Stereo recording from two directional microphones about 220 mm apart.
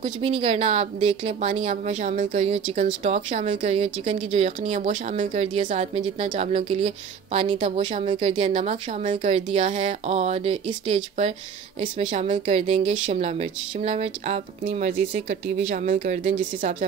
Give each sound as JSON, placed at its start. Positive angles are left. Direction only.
{"t": 0.0, "sound": "speech", "side_deg": -25}